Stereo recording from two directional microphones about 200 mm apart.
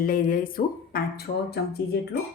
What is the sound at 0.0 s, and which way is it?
Speech, 45° left (ahead or behind).